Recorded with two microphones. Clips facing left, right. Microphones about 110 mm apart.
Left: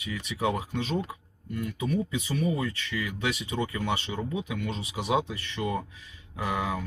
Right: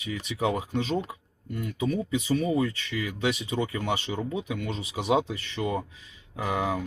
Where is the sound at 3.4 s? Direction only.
20° right (ahead or behind).